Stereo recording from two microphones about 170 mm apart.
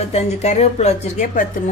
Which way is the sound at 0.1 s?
40° left (ahead or behind).